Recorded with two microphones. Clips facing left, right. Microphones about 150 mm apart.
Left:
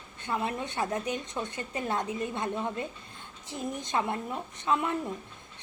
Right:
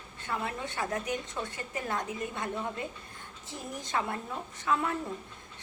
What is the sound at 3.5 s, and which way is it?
A woman's voice, 20° left (ahead or behind).